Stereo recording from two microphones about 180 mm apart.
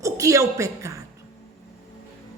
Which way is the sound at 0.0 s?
15° right (ahead or behind).